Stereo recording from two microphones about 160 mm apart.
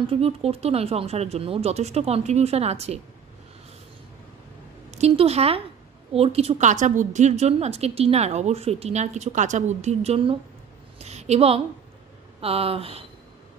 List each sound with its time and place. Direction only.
0.0 s speech: 40° right (ahead or behind)
4.9 s a woman's voice: 40° right (ahead or behind)